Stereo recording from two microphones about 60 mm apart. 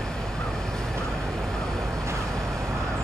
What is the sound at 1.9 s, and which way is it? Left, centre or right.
Vehicle, right.